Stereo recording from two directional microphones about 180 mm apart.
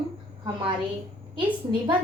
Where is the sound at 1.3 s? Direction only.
25° right (ahead or behind).